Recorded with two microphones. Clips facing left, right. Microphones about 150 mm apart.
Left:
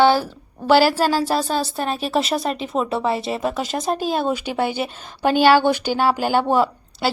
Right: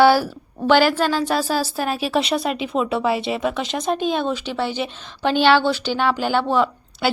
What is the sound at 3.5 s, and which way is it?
A woman's voice, 45° left (ahead or behind).